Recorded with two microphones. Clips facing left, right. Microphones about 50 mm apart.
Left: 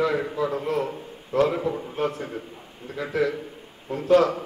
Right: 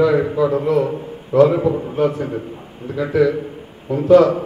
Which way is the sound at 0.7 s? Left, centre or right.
Right.